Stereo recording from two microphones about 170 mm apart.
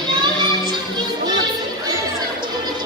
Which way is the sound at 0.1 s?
25° right (ahead or behind).